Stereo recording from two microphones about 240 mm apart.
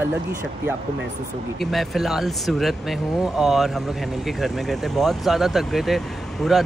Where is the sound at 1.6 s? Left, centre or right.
Centre.